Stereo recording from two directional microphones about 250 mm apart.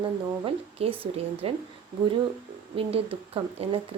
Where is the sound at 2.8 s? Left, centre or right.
Right.